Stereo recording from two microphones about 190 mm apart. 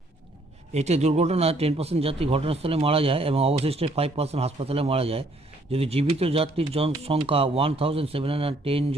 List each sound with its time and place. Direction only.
0.7 s a man's voice: 35° right (ahead or behind)